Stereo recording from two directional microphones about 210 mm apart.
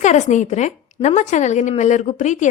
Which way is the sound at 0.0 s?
35° left (ahead or behind).